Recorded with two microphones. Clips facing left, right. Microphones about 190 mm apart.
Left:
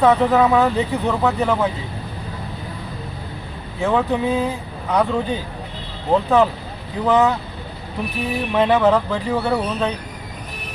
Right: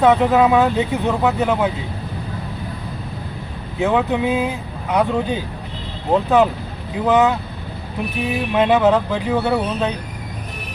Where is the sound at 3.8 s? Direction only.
15° right (ahead or behind).